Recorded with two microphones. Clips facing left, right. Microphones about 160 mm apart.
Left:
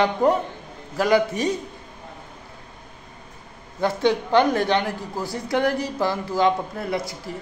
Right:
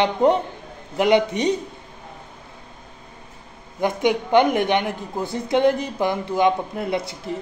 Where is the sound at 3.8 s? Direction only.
15° right (ahead or behind).